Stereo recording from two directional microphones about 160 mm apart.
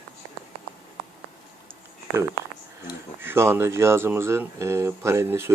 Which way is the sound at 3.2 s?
15° right (ahead or behind).